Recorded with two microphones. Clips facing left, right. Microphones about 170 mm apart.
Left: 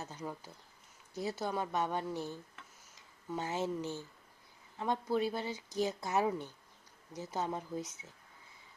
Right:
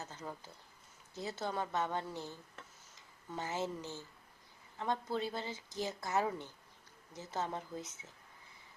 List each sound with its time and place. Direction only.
0.0 s a woman's voice: 15° left (ahead or behind)